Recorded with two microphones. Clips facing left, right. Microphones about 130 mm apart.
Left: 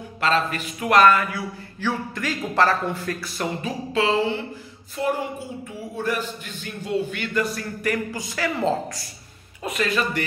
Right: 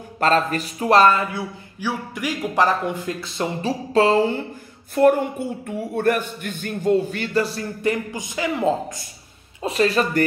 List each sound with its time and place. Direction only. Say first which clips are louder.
0.2 s a man's voice: right 4 dB; 40° right (ahead or behind); by 1.4 s 25° right (ahead or behind)
1.8 s a man's voice: even; 10° right (ahead or behind)
3.9 s a sound: right 5 dB; 45° right (ahead or behind)
5.0 s a woman's voice: right 9 dB; 55° right (ahead or behind); by 9.0 s 15° right (ahead or behind)
9.6 s a man's voice: right 5 dB; 30° right (ahead or behind)